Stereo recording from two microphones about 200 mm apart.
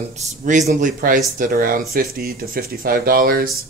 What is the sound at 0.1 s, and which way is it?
A man's voice, 35° right (ahead or behind).